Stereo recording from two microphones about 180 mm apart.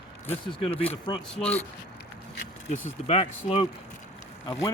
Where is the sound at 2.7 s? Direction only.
35° left (ahead or behind).